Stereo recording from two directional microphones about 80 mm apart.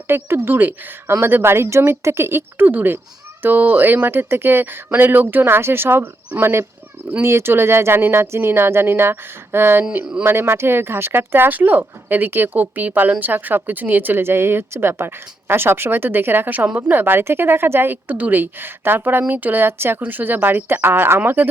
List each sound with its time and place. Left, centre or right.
0.1 s speech: right